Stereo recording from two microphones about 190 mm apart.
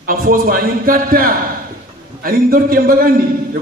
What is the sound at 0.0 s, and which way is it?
A man's voice, 50° right (ahead or behind).